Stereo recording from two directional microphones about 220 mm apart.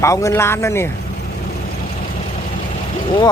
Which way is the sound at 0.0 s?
15° left (ahead or behind).